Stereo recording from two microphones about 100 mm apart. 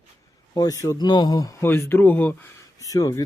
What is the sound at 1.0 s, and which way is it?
Speech, 45° left (ahead or behind).